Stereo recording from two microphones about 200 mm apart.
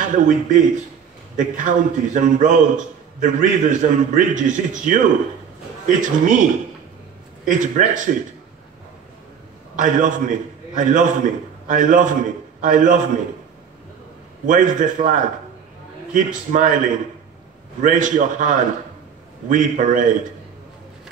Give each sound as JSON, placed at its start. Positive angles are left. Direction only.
{"t": 0.0, "sound": "a man's voice", "side_deg": -40}
{"t": 9.8, "sound": "a man's voice", "side_deg": -40}
{"t": 14.4, "sound": "a man's voice", "side_deg": -40}